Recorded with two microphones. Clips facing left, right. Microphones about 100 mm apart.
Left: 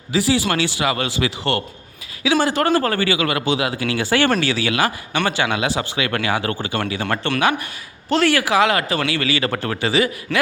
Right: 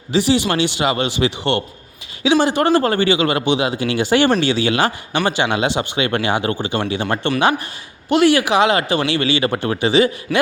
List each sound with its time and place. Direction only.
0.1 s speech: 20° right (ahead or behind)
8.1 s speech: 15° right (ahead or behind)
10.3 s a man's voice: 5° right (ahead or behind)